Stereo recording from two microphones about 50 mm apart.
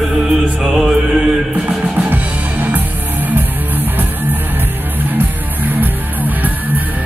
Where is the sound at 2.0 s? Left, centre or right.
Right.